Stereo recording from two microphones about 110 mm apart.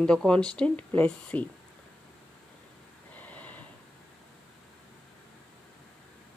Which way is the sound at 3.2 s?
15° left (ahead or behind).